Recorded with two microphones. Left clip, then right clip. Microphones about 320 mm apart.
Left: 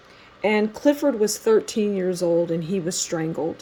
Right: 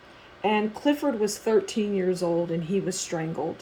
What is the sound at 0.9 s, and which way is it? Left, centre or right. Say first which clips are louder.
Speech: left 6 dB; left.